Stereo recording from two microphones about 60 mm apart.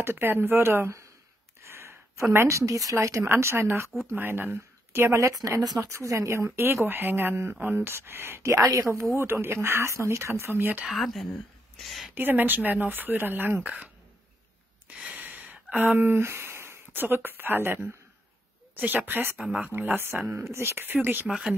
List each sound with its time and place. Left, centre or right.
0.0 s a woman's voice: right
1.6 s a sound: right
2.3 s a woman's voice: right
3.3 s speech: right
5.9 s a woman's voice: right
8.6 s speech: right
10.9 s a woman's voice: centre
12.2 s a woman's voice: right
14.9 s a sound: centre
15.1 s a sound: right
18.8 s a woman's voice: right